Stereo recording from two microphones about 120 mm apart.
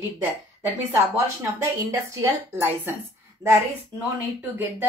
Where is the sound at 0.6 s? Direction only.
20° right (ahead or behind).